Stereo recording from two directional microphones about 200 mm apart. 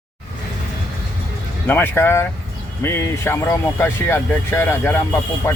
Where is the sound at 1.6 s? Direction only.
10° left (ahead or behind).